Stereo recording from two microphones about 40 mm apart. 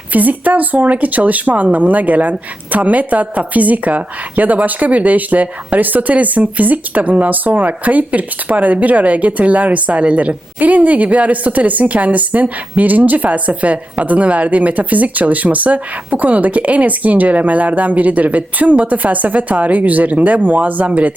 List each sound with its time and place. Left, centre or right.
0.1 s a woman's voice: right
10.6 s a woman's voice: right